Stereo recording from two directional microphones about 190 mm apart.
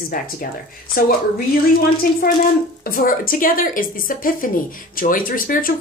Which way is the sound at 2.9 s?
50° left (ahead or behind).